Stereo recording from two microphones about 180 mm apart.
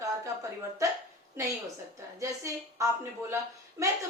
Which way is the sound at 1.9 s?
15° right (ahead or behind).